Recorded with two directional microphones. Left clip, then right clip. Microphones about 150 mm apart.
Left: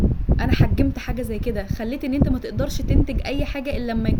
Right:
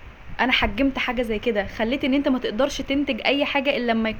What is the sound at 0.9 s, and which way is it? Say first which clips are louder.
A woman's voice: right 5 dB; 35° right (ahead or behind).